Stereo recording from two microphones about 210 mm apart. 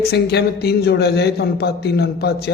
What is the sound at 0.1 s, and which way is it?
Speech, 50° left (ahead or behind).